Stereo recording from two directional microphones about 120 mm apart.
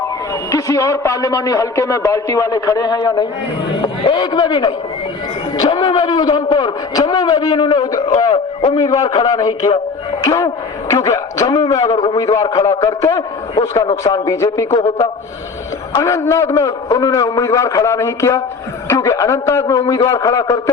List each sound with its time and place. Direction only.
0.5 s a man's voice: 25° left (ahead or behind)
13.6 s a man's voice: 45° left (ahead or behind)
14.0 s a man's voice: 30° left (ahead or behind)